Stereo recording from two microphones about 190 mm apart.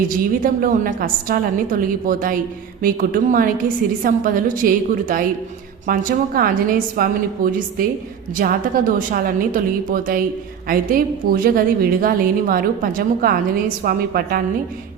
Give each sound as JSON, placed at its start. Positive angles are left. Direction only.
{"t": 0.4, "sound": "a woman's voice", "side_deg": -45}